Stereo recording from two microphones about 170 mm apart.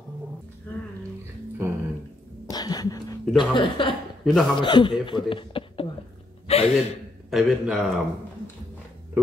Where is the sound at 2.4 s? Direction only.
25° left (ahead or behind).